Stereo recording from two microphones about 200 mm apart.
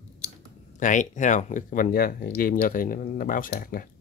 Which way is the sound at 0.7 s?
40° left (ahead or behind).